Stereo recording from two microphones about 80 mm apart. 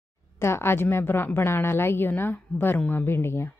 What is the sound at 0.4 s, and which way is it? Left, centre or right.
A woman's voice, left.